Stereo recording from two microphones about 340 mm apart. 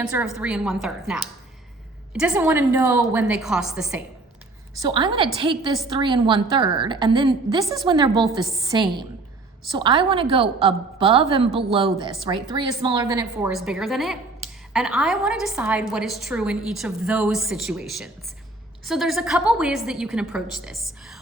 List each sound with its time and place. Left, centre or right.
0.0 s a woman's voice: centre
4.8 s a woman's voice: centre